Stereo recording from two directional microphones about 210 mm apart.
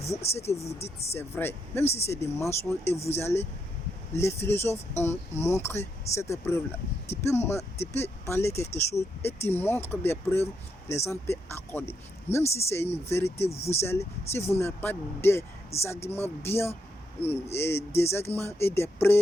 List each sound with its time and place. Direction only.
0.0 s speech: 30° left (ahead or behind)
1.1 s speech: 10° left (ahead or behind)
1.8 s speech: 30° left (ahead or behind)
2.0 s speech: 10° left (ahead or behind)
2.9 s speech: 30° left (ahead or behind)
3.2 s speech: 10° left (ahead or behind)
13.3 s speech: 30° left (ahead or behind)
13.8 s speech: 10° left (ahead or behind)
15.7 s speech: 30° left (ahead or behind)
16.0 s speech: 10° left (ahead or behind)